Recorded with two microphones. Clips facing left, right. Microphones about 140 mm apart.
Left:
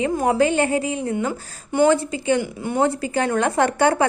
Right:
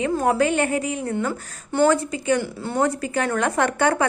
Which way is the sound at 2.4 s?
15° left (ahead or behind).